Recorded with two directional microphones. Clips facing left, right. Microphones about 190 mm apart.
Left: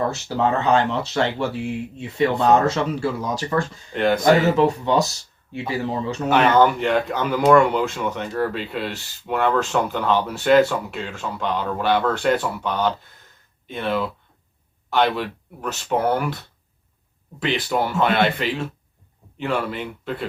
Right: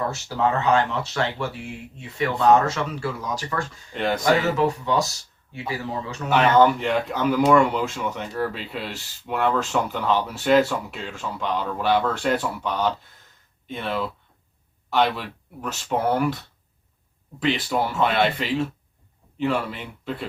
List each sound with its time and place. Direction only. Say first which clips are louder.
0.6 s speech: left 2 dB; 25° left (ahead or behind)
3.9 s speech: left 5 dB; centre (ahead or behind)
4.5 s speech: left 4 dB; 25° left (ahead or behind)
6.3 s speech: left 1 dB; centre (ahead or behind)
17.4 s speech: left 1 dB; centre (ahead or behind)